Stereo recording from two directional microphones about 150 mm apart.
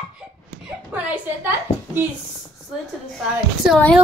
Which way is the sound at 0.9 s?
10° right (ahead or behind).